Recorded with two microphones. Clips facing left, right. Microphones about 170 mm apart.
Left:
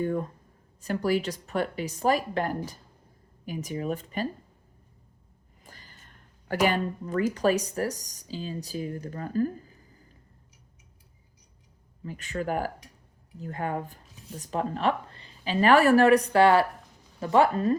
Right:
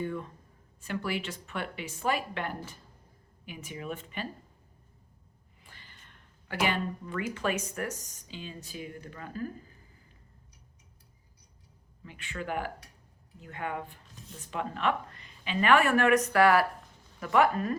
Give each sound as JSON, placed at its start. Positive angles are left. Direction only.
{"t": 0.0, "sound": "a sound", "side_deg": 45}
{"t": 0.8, "sound": "speech", "side_deg": 40}
{"t": 5.6, "sound": "speech", "side_deg": 40}
{"t": 12.0, "sound": "a woman's voice", "side_deg": 40}